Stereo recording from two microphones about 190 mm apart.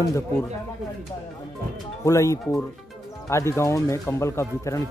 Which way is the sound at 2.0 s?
15° left (ahead or behind).